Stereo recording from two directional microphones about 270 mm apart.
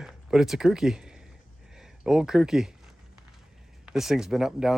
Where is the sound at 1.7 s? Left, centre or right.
Centre.